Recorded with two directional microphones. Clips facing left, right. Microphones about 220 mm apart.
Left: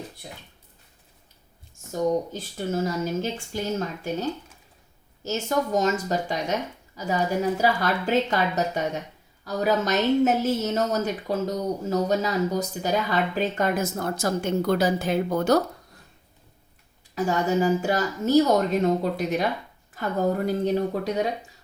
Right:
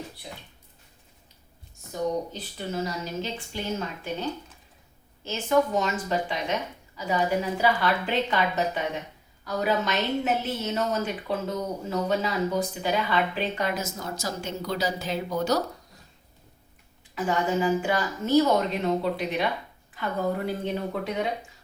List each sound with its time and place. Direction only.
1.9 s a woman's voice: 45° left (ahead or behind)
5.2 s a woman's voice: 40° left (ahead or behind)
17.2 s a woman's voice: 40° left (ahead or behind)